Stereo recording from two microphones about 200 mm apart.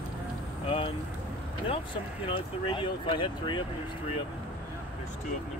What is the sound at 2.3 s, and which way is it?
Speech, 25° left (ahead or behind).